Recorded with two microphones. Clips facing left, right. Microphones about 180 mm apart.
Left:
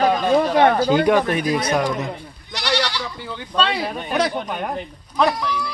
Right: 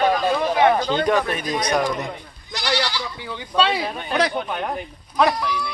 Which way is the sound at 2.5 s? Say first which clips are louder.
Left 1 dB; 70° left (ahead or behind).